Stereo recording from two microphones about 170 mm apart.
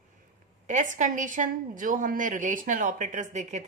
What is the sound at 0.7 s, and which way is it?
A woman's voice, 45° right (ahead or behind).